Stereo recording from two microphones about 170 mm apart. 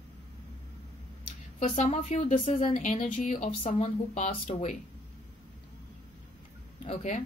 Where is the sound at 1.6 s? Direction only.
45° left (ahead or behind).